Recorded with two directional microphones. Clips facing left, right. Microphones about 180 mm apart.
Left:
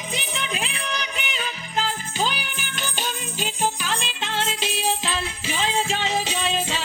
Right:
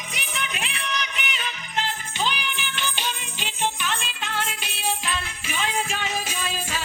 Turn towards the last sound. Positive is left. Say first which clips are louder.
# left 5 dB
turn(degrees=20)  # may be behind; listen again after turning